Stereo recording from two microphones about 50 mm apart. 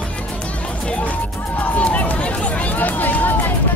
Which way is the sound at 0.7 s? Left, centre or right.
Left.